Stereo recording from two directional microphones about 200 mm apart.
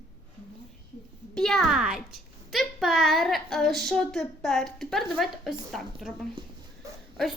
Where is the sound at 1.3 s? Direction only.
Centre (ahead or behind).